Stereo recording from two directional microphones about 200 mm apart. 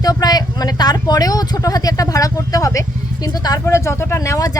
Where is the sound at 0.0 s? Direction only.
20° left (ahead or behind).